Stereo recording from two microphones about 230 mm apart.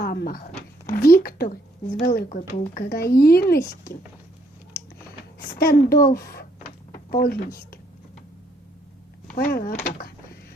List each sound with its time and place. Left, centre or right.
0.0 s speech: left
5.4 s speech: left
9.3 s speech: left